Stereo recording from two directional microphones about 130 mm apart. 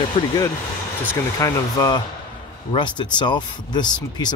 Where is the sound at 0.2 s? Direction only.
45° left (ahead or behind).